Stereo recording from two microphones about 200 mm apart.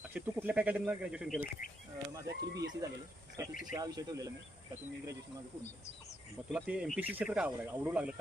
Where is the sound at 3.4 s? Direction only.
15° right (ahead or behind).